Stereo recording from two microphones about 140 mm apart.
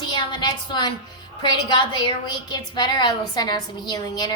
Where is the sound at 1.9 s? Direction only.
35° left (ahead or behind).